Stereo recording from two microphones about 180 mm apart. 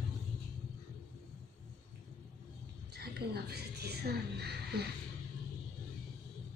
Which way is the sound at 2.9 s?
65° right (ahead or behind).